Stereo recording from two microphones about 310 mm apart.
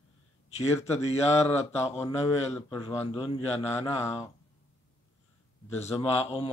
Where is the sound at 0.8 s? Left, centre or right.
Left.